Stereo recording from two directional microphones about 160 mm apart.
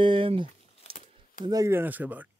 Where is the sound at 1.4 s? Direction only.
25° right (ahead or behind).